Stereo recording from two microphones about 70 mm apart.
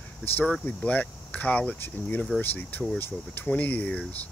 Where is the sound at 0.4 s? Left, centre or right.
Left.